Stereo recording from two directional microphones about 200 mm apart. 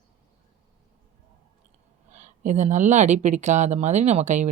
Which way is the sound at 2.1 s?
35° right (ahead or behind).